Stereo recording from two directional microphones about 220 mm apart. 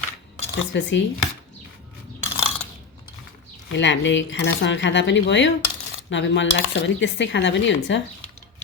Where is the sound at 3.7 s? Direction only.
55° left (ahead or behind).